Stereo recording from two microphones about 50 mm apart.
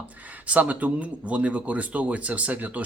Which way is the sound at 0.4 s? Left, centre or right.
Right.